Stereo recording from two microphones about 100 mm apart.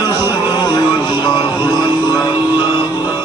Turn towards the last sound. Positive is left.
turn(degrees=45)  # may be behind; listen again after turning